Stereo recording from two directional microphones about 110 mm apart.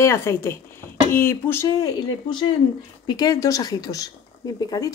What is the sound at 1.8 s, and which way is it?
Speech, 40° left (ahead or behind).